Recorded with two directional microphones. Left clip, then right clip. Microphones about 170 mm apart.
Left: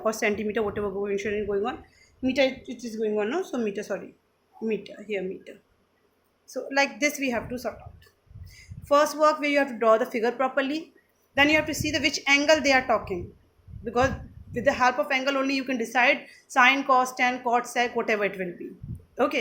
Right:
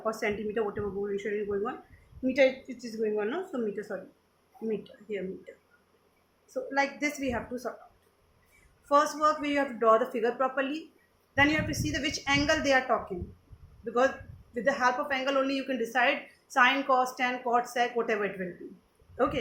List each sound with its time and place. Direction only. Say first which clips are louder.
0.0 s a woman's voice: left 5 dB; 55° left (ahead or behind)
6.5 s a woman's voice: left 4 dB; 55° left (ahead or behind)
8.9 s a woman's voice: left 4 dB; 50° left (ahead or behind)
14.5 s a woman's voice: left 4 dB; 50° left (ahead or behind)